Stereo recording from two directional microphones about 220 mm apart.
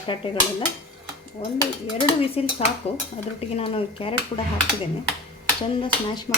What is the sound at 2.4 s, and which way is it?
Speech, 25° left (ahead or behind).